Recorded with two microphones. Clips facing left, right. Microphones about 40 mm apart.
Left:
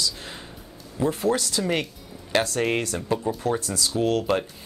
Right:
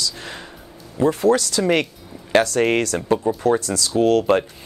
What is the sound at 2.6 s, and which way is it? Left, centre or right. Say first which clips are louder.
Speech: right 6 dB; right.